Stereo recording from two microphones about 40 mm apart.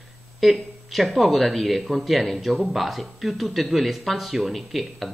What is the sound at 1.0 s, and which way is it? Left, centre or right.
Speech, centre.